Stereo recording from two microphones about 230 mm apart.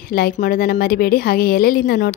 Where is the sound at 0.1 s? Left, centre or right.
Left.